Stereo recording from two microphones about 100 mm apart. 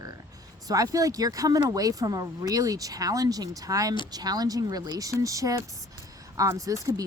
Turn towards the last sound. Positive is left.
turn(degrees=-35)  # may be behind; listen again after turning